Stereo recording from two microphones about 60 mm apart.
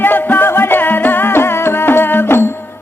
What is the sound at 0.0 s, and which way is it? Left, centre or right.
Music, left.